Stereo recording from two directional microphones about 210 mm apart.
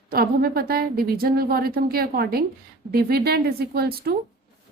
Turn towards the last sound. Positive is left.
turn(degrees=-45)  # may be behind; listen again after turning